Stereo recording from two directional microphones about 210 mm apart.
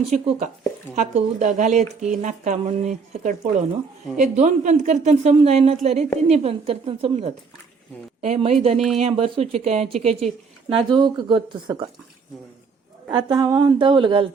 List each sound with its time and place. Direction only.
0.1 s a woman's voice: 35° right (ahead or behind)
13.1 s speech: 20° right (ahead or behind)